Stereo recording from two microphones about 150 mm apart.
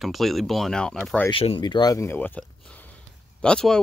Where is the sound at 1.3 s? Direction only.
35° left (ahead or behind).